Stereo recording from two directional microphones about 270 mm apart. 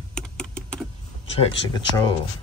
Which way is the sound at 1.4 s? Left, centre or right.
Centre.